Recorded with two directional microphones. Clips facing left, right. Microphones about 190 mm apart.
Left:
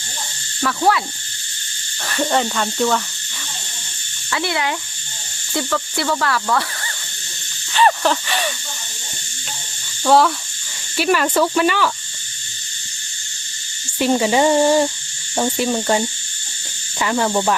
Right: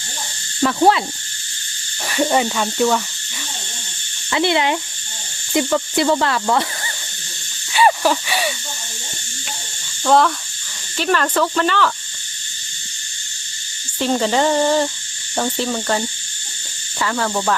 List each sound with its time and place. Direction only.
0.6 s owl: 25° right (ahead or behind)
2.0 s speech: 10° right (ahead or behind)
4.3 s speech: 20° right (ahead or behind)
7.7 s wheeze: 10° right (ahead or behind)
10.0 s speech: 5° left (ahead or behind)
14.0 s speech: 10° left (ahead or behind)